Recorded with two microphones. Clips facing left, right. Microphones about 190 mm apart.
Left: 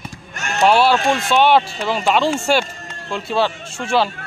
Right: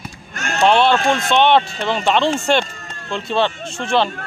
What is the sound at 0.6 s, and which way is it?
Speech, 5° left (ahead or behind).